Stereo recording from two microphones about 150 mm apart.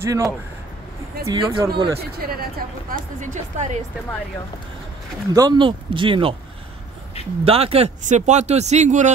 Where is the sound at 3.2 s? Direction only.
55° right (ahead or behind).